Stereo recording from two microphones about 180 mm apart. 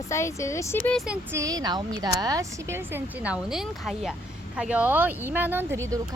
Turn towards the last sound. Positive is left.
turn(degrees=-15)  # may be behind; listen again after turning